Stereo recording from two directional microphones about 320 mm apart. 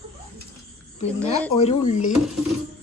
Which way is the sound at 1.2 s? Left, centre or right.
Centre.